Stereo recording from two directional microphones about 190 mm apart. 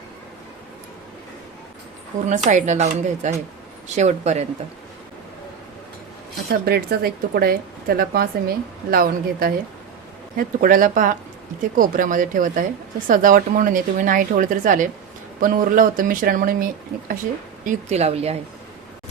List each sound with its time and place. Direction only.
2.2 s speech: 40° right (ahead or behind)
6.5 s speech: 55° right (ahead or behind)
17.7 s speech: 35° right (ahead or behind)